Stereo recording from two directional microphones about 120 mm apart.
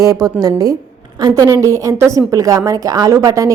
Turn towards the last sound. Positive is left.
turn(degrees=-30)  # may be behind; listen again after turning